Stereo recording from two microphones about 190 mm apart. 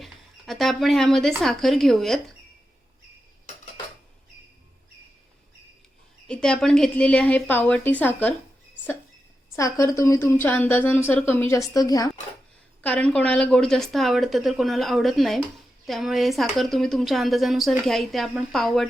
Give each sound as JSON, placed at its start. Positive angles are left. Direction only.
{"t": 0.0, "sound": "speech", "side_deg": 0}
{"t": 6.2, "sound": "a woman's voice", "side_deg": 5}
{"t": 9.6, "sound": "a woman's voice", "side_deg": 15}
{"t": 12.8, "sound": "speech", "side_deg": 5}